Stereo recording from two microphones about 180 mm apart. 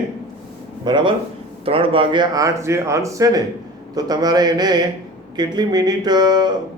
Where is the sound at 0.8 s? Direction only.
25° right (ahead or behind).